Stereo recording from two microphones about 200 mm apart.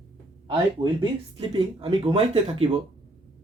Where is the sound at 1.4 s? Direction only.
25° right (ahead or behind).